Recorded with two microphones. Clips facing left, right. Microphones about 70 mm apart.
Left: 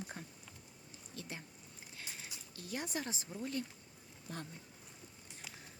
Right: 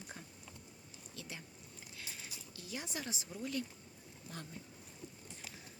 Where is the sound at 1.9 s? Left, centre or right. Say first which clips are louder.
Left 1 dB; left.